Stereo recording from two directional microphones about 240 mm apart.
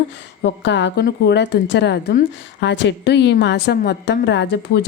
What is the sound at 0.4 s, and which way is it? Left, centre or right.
Speech, left.